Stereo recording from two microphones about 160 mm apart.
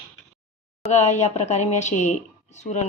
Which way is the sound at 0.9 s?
45° left (ahead or behind).